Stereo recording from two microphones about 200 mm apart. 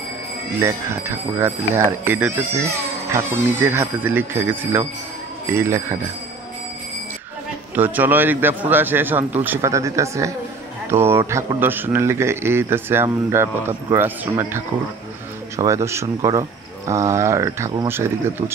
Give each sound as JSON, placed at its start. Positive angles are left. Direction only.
{"t": 0.6, "sound": "speech", "side_deg": -15}
{"t": 7.7, "sound": "speech", "side_deg": -10}